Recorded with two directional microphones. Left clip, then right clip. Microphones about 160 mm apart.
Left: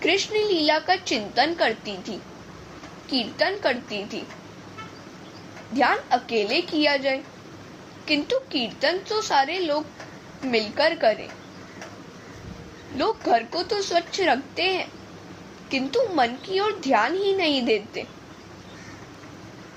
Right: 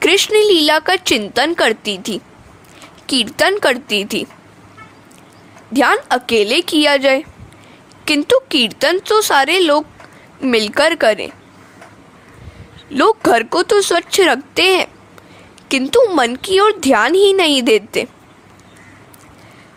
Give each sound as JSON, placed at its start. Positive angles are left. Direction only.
{"t": 0.0, "sound": "a woman's voice", "side_deg": -65}
{"t": 5.7, "sound": "a woman's voice", "side_deg": -60}
{"t": 13.0, "sound": "speech", "side_deg": -75}
{"t": 15.7, "sound": "a woman's voice", "side_deg": -70}